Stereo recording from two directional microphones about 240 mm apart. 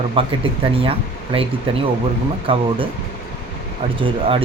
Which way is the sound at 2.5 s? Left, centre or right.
Right.